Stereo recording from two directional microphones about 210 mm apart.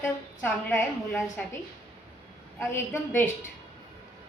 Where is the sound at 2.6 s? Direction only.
10° left (ahead or behind).